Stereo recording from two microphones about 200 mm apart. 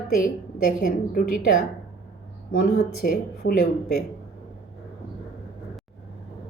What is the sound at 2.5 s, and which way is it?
Speech, 50° left (ahead or behind).